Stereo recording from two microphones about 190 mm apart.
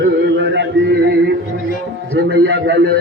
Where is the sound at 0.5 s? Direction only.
65° right (ahead or behind).